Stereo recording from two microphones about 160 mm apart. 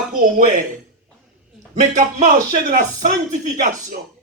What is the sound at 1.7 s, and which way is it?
A man's voice, 55° right (ahead or behind).